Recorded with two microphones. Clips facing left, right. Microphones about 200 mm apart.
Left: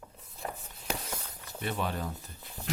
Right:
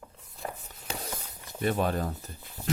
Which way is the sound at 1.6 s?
45° right (ahead or behind).